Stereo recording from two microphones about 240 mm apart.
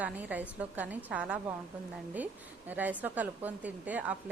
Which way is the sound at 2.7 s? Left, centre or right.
Centre.